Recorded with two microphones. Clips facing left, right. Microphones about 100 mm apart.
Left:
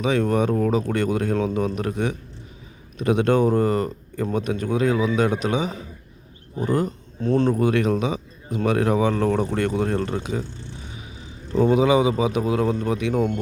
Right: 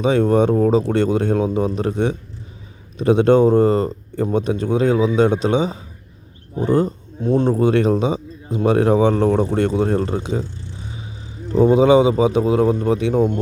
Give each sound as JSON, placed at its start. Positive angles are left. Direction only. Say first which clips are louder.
{"t": 0.0, "sound": "speech", "louder": "right 5 dB", "side_deg": -30}
{"t": 7.2, "sound": "speech", "louder": "right 3 dB", "side_deg": -15}
{"t": 7.5, "sound": "speech", "louder": "right 4 dB", "side_deg": -30}
{"t": 11.5, "sound": "speech", "louder": "right 5 dB", "side_deg": -25}